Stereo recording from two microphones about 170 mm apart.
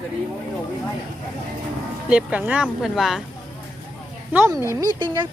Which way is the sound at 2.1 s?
5° right (ahead or behind).